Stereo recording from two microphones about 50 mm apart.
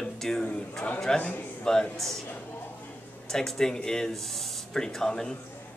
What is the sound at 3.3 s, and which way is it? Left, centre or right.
A man's voice, centre.